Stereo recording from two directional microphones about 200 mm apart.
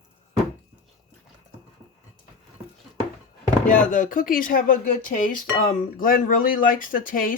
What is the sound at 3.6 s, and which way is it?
Speech, 40° left (ahead or behind).